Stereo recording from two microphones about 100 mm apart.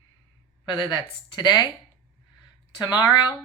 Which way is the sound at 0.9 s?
45° left (ahead or behind).